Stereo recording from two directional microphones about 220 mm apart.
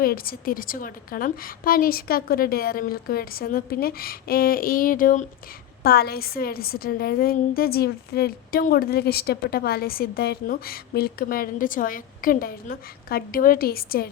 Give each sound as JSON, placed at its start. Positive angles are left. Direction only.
{"t": 0.0, "sound": "a woman's voice", "side_deg": 40}